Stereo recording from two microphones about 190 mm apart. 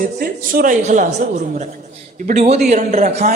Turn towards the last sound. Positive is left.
turn(degrees=-35)  # may be behind; listen again after turning